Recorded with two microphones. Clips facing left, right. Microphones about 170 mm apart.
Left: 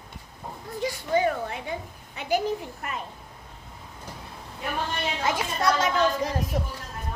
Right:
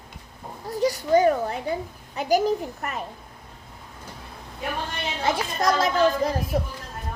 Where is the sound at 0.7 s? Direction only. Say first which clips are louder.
Right 6 dB; 40° right (ahead or behind).